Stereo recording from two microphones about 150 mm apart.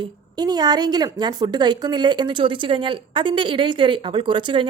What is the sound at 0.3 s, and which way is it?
A woman's voice, 25° right (ahead or behind).